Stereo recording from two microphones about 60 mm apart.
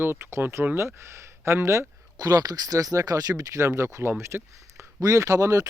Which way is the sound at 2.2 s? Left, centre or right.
Right.